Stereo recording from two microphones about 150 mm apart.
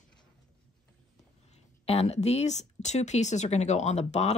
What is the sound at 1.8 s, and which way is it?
Speech, 45° left (ahead or behind).